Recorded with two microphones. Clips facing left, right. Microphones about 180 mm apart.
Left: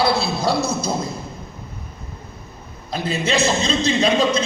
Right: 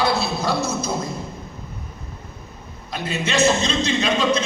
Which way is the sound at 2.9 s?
35° left (ahead or behind).